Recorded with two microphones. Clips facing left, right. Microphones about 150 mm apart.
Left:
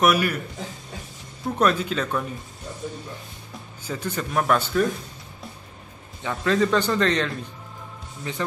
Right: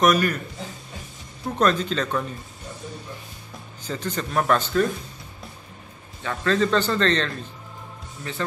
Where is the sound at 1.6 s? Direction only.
10° left (ahead or behind).